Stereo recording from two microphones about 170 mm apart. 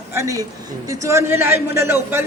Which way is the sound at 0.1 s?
20° right (ahead or behind).